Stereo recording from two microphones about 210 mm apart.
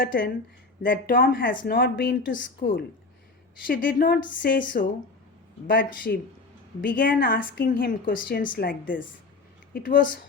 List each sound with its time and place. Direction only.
0.0 s a woman's voice: 40° left (ahead or behind)
3.7 s a woman's voice: 40° left (ahead or behind)
5.9 s a woman's voice: 40° left (ahead or behind)